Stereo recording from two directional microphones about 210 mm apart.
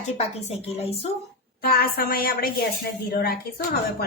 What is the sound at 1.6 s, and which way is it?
A woman's voice, 45° left (ahead or behind).